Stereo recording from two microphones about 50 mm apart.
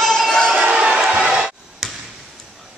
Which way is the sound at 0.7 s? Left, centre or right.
Centre.